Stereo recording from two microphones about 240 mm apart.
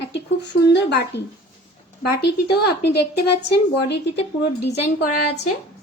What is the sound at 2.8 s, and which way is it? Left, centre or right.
Speech, left.